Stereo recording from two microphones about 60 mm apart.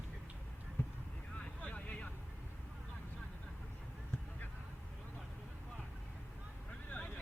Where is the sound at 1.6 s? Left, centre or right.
Left.